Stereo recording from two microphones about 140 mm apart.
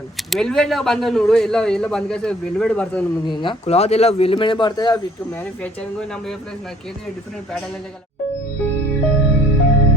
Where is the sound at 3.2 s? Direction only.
35° left (ahead or behind).